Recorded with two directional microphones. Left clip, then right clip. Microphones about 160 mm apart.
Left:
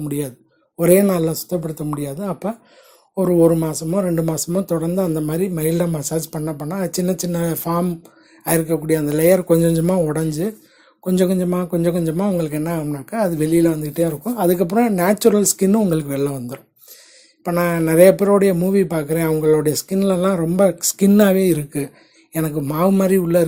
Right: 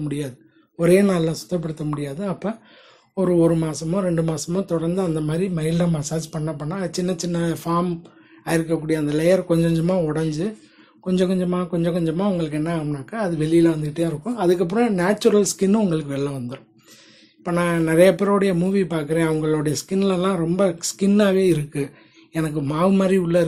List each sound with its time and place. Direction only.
0.0 s a man's voice: 40° left (ahead or behind)